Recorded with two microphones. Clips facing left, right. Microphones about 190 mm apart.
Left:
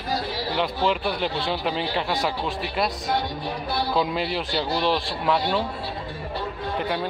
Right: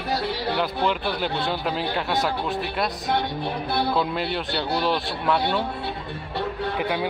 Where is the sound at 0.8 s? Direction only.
Centre (ahead or behind).